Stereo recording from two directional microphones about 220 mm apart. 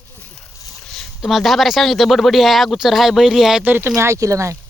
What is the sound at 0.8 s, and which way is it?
Speech, centre (ahead or behind).